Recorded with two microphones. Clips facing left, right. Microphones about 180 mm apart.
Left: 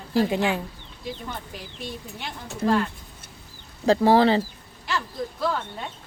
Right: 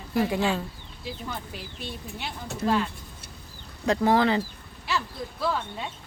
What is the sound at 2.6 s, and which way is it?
Speech, 30° left (ahead or behind).